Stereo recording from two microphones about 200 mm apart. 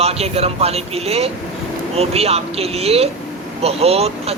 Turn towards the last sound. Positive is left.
turn(degrees=-30)  # may be behind; listen again after turning